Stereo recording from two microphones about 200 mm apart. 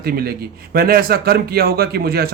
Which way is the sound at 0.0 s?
50° right (ahead or behind).